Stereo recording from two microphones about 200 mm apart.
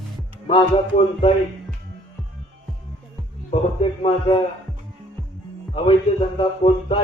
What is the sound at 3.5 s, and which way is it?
Speech, 30° left (ahead or behind).